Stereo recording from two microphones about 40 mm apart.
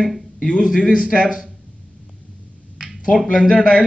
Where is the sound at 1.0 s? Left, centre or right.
Right.